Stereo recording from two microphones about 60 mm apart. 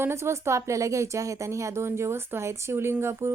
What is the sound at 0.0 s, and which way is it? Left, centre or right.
A woman's voice, right.